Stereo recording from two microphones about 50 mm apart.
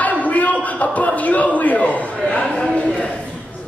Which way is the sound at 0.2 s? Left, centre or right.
Left.